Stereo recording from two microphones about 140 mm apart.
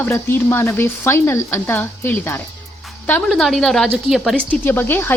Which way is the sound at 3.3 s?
Centre (ahead or behind).